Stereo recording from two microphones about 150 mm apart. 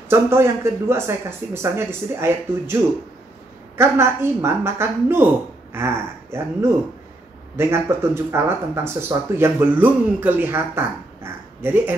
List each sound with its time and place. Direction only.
0.1 s speech: 15° right (ahead or behind)